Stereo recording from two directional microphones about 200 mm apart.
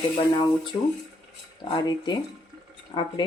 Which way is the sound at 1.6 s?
20° left (ahead or behind).